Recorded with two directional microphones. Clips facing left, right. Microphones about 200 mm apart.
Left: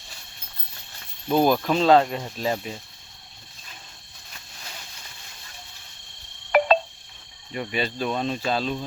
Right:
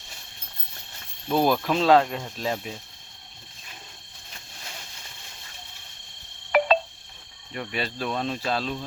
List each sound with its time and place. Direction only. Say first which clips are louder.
1.3 s speech: left 2 dB; centre (ahead or behind)
6.5 s telephone dialing: left 2 dB; 45° left (ahead or behind)
7.5 s speech: left 3 dB; centre (ahead or behind)